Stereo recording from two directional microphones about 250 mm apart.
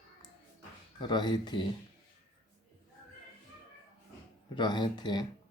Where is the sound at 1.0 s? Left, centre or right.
Centre.